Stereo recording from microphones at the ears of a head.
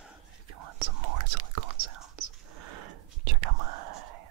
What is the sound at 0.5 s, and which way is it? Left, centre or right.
Whispering, right.